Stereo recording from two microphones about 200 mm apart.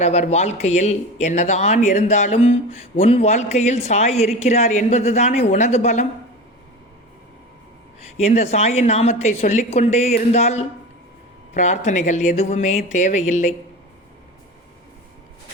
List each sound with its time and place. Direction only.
0.0 s speech: 35° left (ahead or behind)
8.0 s speech: 35° left (ahead or behind)